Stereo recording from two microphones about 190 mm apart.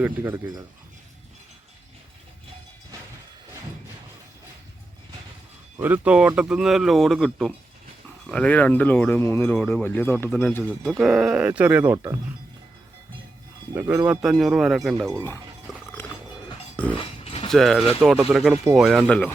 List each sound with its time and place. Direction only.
0.0 s speech: 10° right (ahead or behind)
5.8 s speech: 10° right (ahead or behind)
13.7 s speech: 15° right (ahead or behind)
14.2 s speech: 5° right (ahead or behind)
14.9 s speech: 15° right (ahead or behind)
16.0 s music: 10° left (ahead or behind)
17.0 s mechanisms: 30° left (ahead or behind)
17.5 s speech: centre (ahead or behind)
18.5 s speech: 15° right (ahead or behind)
18.8 s speech: centre (ahead or behind)